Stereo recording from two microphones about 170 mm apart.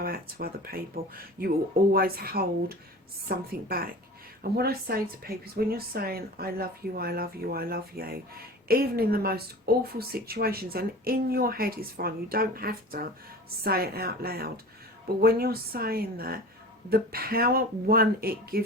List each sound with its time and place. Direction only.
0.0 s a woman's voice: 60° right (ahead or behind)